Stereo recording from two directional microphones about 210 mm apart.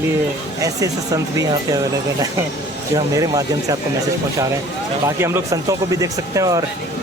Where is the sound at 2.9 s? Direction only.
15° right (ahead or behind).